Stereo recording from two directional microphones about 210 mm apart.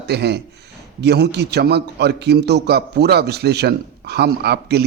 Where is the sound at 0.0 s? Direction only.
55° right (ahead or behind).